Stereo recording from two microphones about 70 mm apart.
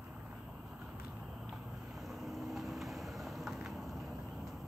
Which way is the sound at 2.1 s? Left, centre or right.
Centre.